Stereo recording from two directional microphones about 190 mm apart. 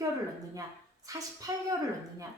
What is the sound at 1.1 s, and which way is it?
Speech, 20° right (ahead or behind).